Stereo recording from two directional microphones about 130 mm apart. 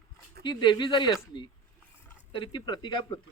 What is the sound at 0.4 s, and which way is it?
Speech, 35° left (ahead or behind).